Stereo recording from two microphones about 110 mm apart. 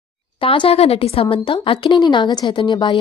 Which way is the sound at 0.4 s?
50° left (ahead or behind).